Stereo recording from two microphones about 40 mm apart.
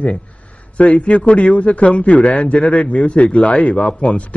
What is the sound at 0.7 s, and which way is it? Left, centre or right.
A man's voice, left.